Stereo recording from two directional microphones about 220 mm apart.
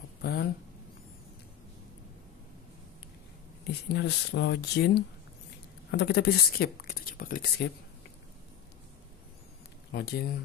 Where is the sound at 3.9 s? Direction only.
50° left (ahead or behind).